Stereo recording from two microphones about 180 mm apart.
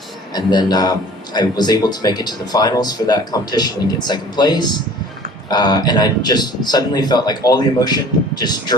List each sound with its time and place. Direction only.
0.3 s speech: 20° left (ahead or behind)